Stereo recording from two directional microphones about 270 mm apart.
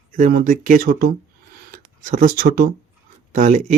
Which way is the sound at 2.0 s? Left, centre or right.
Right.